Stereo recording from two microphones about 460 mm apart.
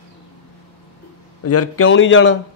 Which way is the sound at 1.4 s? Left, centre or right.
Left.